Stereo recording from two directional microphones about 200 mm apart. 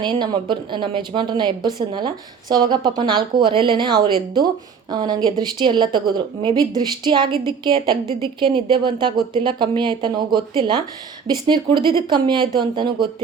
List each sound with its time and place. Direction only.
0.0 s a woman's voice: 25° right (ahead or behind)